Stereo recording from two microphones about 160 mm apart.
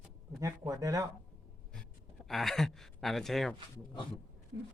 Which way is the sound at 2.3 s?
Centre (ahead or behind).